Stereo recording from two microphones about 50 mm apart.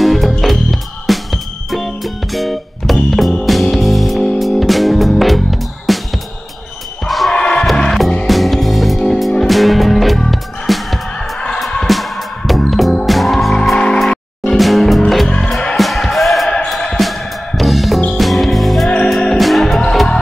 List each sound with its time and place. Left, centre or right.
0.0 s music: centre
7.1 s basketball bounce: centre
7.3 s music: centre
8.3 s music: centre
15.2 s music: centre
15.7 s music: centre